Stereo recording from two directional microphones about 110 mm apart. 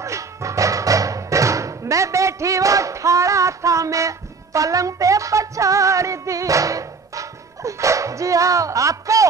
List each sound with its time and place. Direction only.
0.0 s music: 30° right (ahead or behind)